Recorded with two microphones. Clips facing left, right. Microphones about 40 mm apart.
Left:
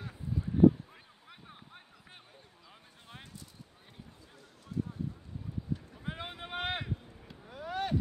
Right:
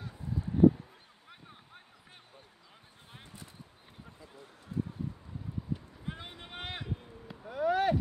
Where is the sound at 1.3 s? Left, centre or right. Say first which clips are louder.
Left 1 dB; centre.